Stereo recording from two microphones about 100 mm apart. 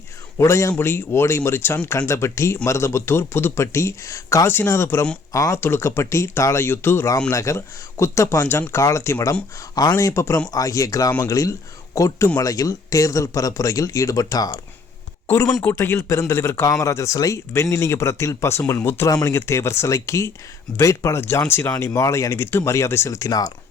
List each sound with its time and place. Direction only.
0.3 s speech: 30° left (ahead or behind)
5.5 s speech: 20° left (ahead or behind); by 14.6 s 35° left (ahead or behind)
15.7 s speech: 25° left (ahead or behind)